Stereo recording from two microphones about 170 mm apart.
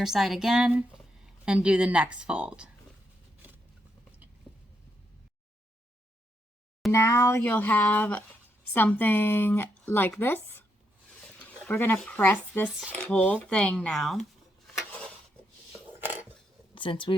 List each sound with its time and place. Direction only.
0.0 s a woman's voice: centre (ahead or behind)
6.9 s speech: 20° left (ahead or behind)
11.7 s speech: 10° left (ahead or behind)
16.7 s speech: 30° left (ahead or behind)